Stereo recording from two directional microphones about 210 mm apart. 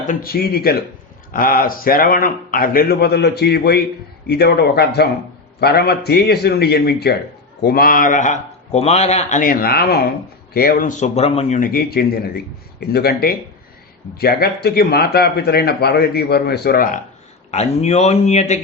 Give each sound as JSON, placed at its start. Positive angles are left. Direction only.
{"t": 0.0, "sound": "speech", "side_deg": 40}
{"t": 17.5, "sound": "speech", "side_deg": 30}